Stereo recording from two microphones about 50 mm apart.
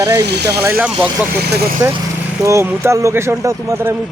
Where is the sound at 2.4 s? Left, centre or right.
Right.